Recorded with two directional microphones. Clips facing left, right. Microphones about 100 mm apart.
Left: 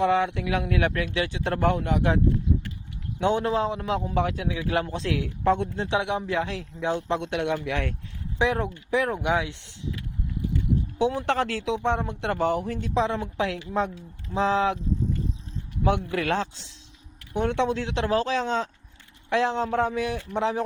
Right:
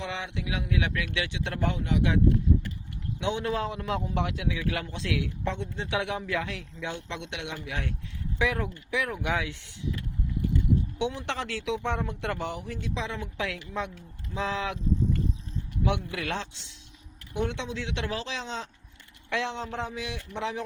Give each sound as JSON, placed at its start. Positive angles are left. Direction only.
{"t": 0.0, "sound": "speech", "side_deg": 50}
{"t": 3.5, "sound": "a man's voice", "side_deg": 30}
{"t": 5.4, "sound": "speech", "side_deg": 50}
{"t": 5.9, "sound": "a man's voice", "side_deg": 25}
{"t": 7.7, "sound": "speech", "side_deg": 65}
{"t": 8.4, "sound": "a man's voice", "side_deg": 30}
{"t": 9.2, "sound": "speech", "side_deg": 20}
{"t": 10.9, "sound": "speech", "side_deg": 40}
{"t": 11.6, "sound": "a man's voice", "side_deg": 30}
{"t": 12.4, "sound": "a man's voice", "side_deg": 45}
{"t": 15.8, "sound": "speech", "side_deg": 45}
{"t": 17.3, "sound": "a man's voice", "side_deg": 50}